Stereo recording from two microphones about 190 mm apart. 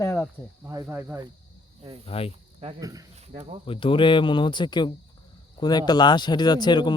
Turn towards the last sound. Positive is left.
turn(degrees=25)  # may be behind; listen again after turning